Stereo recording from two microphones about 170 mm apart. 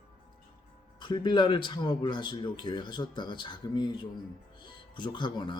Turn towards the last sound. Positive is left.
turn(degrees=30)  # may be behind; listen again after turning